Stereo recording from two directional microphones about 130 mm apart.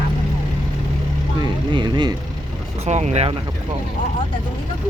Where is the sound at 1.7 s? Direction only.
35° right (ahead or behind).